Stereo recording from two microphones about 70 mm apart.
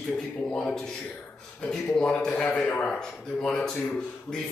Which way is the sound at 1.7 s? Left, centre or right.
Centre.